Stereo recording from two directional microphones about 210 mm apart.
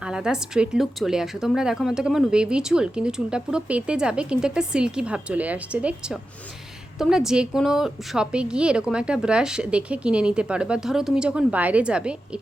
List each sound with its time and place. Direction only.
0.0 s a woman's voice: 5° right (ahead or behind)